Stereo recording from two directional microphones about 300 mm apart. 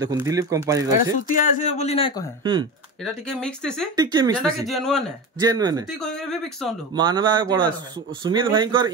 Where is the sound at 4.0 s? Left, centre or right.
Centre.